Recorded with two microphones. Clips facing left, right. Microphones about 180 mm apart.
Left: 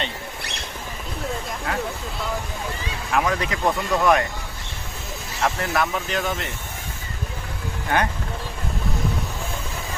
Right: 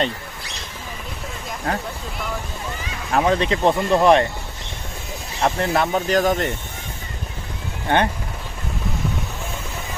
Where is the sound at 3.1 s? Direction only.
30° right (ahead or behind).